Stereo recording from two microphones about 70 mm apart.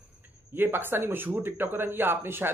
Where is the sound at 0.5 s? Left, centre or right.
Right.